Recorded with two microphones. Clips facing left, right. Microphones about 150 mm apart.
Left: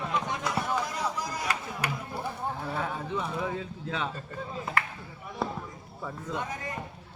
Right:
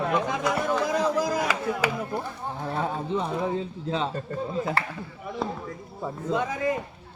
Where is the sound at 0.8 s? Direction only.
90° right.